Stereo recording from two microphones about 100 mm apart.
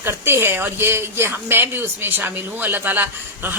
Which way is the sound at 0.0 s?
25° right (ahead or behind).